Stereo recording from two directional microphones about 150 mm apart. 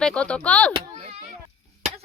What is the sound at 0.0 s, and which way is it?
Speech, 5° left (ahead or behind).